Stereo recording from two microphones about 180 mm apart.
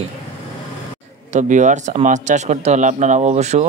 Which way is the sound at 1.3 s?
45° right (ahead or behind).